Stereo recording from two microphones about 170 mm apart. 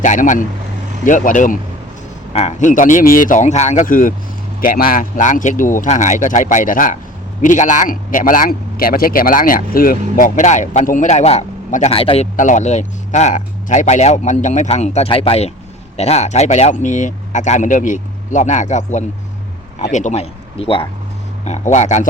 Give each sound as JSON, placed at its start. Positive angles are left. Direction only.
{"t": 0.0, "sound": "a man's voice", "side_deg": 45}